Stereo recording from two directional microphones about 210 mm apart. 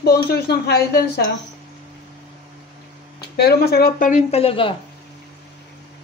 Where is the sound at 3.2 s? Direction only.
50° left (ahead or behind); by 4.7 s 25° left (ahead or behind).